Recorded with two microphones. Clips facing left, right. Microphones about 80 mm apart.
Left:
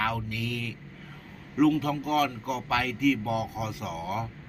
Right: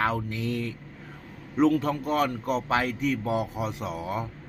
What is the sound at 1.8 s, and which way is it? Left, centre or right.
Mantra, right.